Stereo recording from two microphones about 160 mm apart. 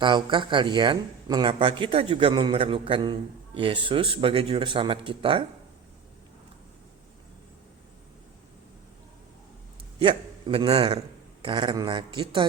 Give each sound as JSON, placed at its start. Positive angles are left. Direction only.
{"t": 0.0, "sound": "speech", "side_deg": -30}
{"t": 10.0, "sound": "a man's voice", "side_deg": -30}